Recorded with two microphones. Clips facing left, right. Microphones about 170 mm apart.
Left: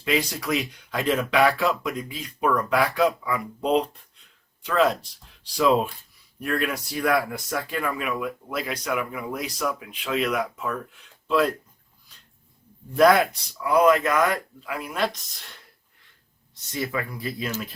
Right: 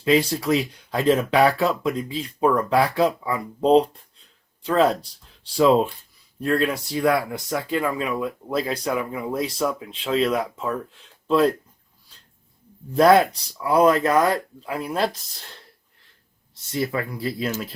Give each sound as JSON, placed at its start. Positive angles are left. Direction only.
{"t": 0.0, "sound": "speech", "side_deg": -30}
{"t": 13.6, "sound": "speech", "side_deg": -30}
{"t": 16.7, "sound": "speech", "side_deg": -30}